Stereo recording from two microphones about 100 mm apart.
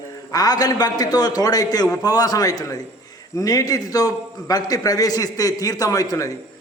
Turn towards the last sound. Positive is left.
turn(degrees=35)  # may be behind; listen again after turning